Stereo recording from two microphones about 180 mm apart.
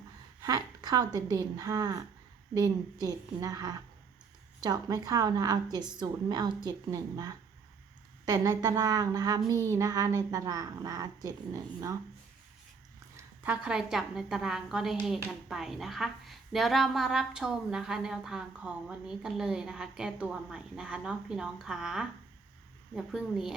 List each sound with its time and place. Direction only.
0.4 s a woman's voice: 20° right (ahead or behind)
13.1 s a woman's voice: 10° right (ahead or behind)